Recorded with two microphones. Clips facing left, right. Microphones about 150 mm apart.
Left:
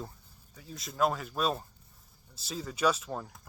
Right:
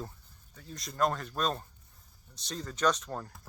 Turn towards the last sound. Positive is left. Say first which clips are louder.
# even
turn(degrees=5)  # may be behind; listen again after turning